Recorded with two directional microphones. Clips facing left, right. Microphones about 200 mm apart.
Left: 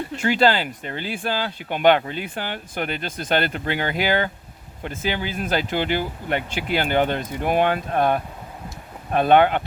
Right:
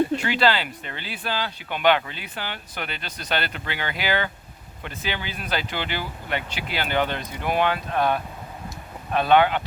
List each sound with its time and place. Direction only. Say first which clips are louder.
0.2 s speech: left 3 dB; 45° left (ahead or behind)